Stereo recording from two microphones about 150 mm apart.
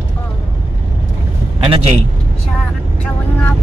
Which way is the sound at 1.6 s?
35° right (ahead or behind).